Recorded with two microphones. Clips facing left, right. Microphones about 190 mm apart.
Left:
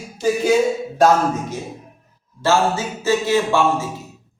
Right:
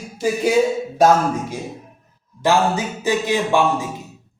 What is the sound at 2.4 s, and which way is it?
A man's voice, 15° right (ahead or behind).